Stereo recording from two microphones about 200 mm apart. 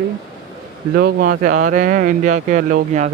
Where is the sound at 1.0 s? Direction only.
45° right (ahead or behind).